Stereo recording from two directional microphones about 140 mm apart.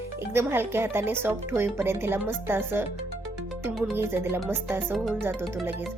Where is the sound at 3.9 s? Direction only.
15° right (ahead or behind).